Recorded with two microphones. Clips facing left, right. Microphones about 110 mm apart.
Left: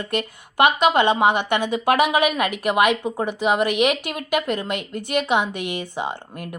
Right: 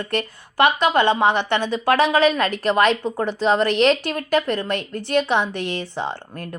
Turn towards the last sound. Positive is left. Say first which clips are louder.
# even
turn(degrees=15)  # may be behind; listen again after turning